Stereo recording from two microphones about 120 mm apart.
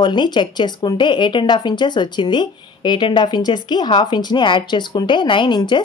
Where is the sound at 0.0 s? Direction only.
40° left (ahead or behind).